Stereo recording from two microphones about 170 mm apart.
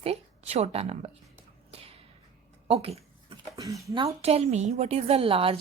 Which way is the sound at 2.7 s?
35° right (ahead or behind).